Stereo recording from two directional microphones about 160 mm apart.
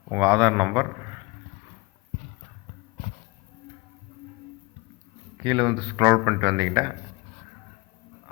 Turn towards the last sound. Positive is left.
turn(degrees=-25)  # may be behind; listen again after turning